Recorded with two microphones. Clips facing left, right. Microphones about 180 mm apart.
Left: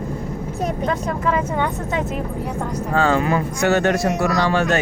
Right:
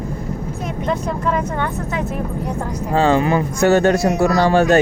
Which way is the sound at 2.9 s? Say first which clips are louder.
Right 3 dB; 25° right (ahead or behind).